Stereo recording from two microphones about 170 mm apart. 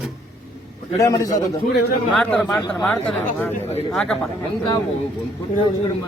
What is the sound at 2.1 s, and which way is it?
Speech, 5° left (ahead or behind).